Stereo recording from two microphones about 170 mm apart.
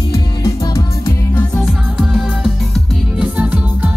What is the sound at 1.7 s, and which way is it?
Music, centre (ahead or behind).